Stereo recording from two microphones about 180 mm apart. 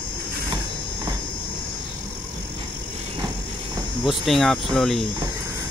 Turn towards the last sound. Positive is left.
turn(degrees=0)  # may be behind; listen again after turning